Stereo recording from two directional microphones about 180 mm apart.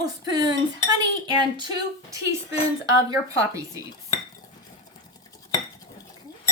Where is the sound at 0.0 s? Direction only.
20° right (ahead or behind).